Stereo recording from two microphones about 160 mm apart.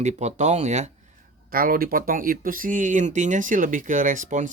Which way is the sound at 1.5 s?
65° right (ahead or behind).